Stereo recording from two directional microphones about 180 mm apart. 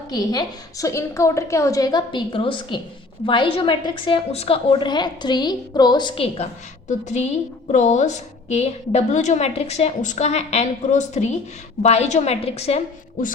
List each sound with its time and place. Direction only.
0.1 s a woman's voice: 20° left (ahead or behind)